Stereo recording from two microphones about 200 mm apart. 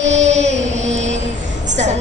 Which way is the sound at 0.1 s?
35° right (ahead or behind).